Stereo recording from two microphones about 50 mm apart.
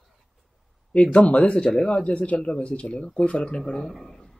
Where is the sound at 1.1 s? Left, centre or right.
Left; by 4.3 s centre.